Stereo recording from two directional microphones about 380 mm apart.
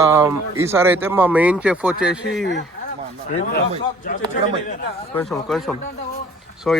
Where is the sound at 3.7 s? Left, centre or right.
Centre.